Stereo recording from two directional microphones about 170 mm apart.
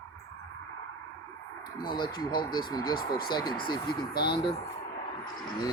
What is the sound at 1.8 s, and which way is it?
Speech, 25° left (ahead or behind).